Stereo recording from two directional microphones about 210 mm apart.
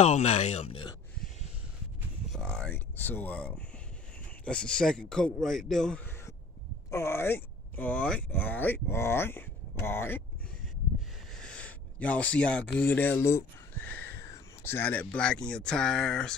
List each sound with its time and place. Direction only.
0.0 s speech: 30° left (ahead or behind)
2.2 s a man's voice: 5° left (ahead or behind)
11.3 s a man's voice: 5° left (ahead or behind)